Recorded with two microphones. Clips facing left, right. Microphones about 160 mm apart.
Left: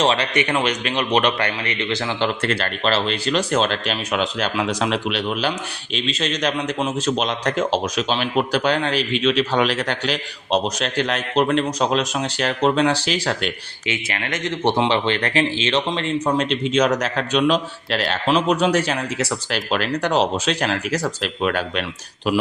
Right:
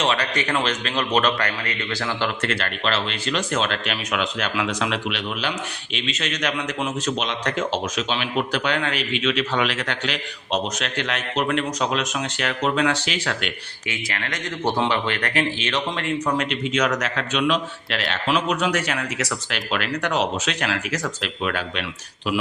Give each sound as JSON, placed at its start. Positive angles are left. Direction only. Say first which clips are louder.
{"t": 0.0, "sound": "speech", "louder": "left 4 dB", "side_deg": 25}
{"t": 0.9, "sound": "a man's voice", "louder": "left 1 dB", "side_deg": 15}
{"t": 2.4, "sound": "speech", "louder": "left 3 dB", "side_deg": 35}
{"t": 13.8, "sound": "speech", "louder": "left 4 dB", "side_deg": 25}